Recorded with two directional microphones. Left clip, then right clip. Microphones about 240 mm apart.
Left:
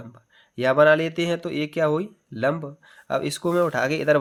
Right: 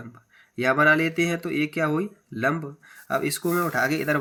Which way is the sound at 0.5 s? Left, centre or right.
Left.